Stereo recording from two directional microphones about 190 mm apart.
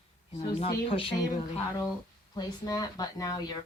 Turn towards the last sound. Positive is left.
turn(degrees=20)  # may be behind; listen again after turning